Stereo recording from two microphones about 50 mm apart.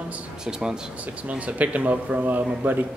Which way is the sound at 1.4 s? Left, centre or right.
Right.